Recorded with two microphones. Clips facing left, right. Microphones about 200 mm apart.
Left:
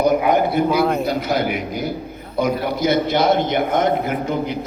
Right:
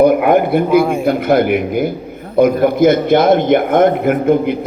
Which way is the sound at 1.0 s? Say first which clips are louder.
Right 8 dB; 55° right (ahead or behind).